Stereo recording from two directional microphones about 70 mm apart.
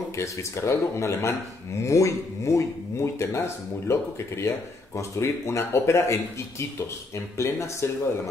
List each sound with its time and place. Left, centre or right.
0.1 s speech: left
7.3 s speech: left